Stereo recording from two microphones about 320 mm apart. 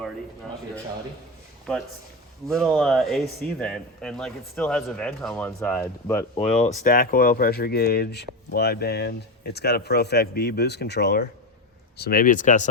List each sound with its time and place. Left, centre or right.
2.5 s speech: centre
6.3 s a man's voice: left